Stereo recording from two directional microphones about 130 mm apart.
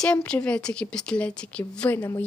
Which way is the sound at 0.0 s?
10° left (ahead or behind).